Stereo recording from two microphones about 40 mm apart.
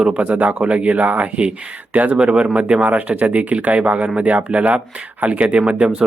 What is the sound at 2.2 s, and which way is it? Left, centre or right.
Speech, right.